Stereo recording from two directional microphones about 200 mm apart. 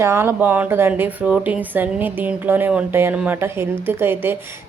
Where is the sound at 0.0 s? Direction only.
10° right (ahead or behind).